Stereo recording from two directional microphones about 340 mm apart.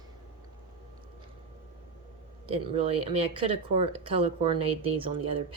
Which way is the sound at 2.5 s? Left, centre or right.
Centre.